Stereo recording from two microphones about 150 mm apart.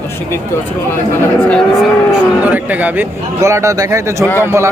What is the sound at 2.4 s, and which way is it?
Speech, 10° right (ahead or behind).